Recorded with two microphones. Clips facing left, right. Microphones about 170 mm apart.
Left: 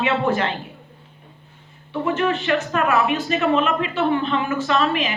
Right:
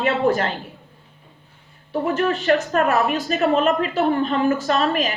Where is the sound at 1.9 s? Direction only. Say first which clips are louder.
Right 1 dB; 40° right (ahead or behind).